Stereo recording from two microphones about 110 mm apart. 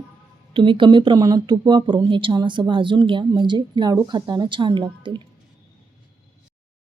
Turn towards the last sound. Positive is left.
turn(degrees=-45)  # may be behind; listen again after turning